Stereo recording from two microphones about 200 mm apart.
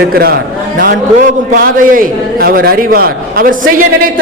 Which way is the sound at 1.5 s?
45° right (ahead or behind).